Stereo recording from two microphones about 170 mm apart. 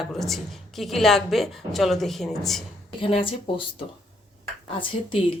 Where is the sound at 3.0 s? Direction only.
30° left (ahead or behind).